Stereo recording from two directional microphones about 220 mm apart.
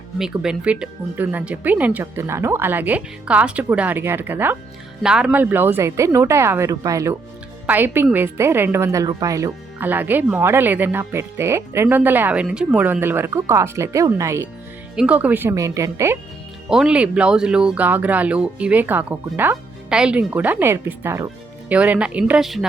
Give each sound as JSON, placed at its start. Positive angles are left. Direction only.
{"t": 0.2, "sound": "a woman's voice", "side_deg": -5}